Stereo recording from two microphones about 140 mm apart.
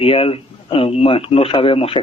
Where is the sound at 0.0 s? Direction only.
40° left (ahead or behind).